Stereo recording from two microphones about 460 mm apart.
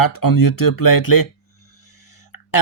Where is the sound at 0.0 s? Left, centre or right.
Left.